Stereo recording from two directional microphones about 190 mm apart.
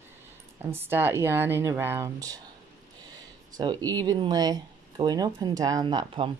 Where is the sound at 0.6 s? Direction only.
10° right (ahead or behind).